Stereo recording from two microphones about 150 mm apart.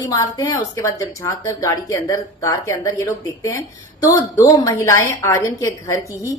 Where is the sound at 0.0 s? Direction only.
25° left (ahead or behind).